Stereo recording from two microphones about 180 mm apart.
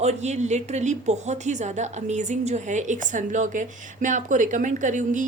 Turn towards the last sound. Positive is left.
turn(degrees=-45)  # may be behind; listen again after turning